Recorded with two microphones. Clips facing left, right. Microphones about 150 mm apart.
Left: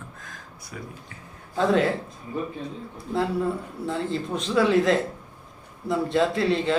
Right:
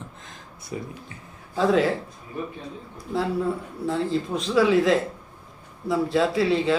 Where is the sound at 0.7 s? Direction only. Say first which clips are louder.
Right 6 dB; 20° right (ahead or behind).